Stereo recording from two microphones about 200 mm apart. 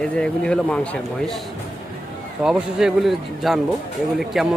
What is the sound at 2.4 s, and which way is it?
Speech, 5° right (ahead or behind).